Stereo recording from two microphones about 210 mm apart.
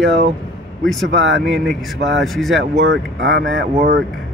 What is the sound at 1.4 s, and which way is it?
Speech, centre (ahead or behind).